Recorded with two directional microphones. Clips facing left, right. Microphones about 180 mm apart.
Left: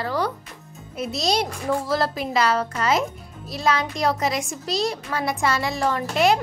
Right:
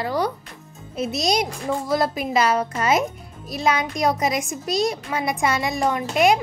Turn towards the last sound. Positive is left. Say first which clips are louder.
# right 1 dB
turn(degrees=-15)  # may be behind; listen again after turning